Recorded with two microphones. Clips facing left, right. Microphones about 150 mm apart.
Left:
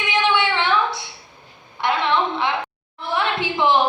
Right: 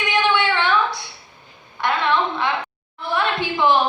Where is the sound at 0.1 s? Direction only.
20° left (ahead or behind).